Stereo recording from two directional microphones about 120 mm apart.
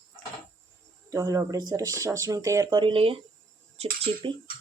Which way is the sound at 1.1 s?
30° right (ahead or behind).